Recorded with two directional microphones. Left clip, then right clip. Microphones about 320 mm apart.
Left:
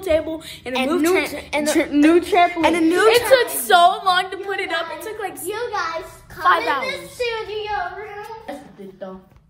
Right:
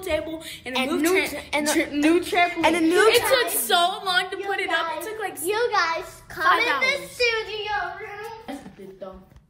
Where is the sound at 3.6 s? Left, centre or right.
Left; by 5.4 s centre.